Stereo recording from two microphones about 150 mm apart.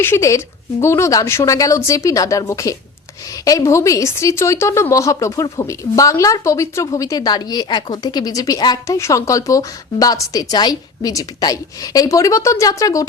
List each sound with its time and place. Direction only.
0.0 s a woman's voice: 20° left (ahead or behind)